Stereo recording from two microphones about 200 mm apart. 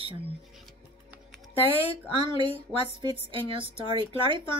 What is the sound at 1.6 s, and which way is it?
Speech, 30° left (ahead or behind).